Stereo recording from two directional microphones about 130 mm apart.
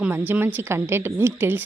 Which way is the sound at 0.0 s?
15° right (ahead or behind).